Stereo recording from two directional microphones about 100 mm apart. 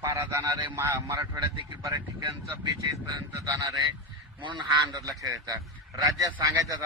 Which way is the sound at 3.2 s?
40° right (ahead or behind).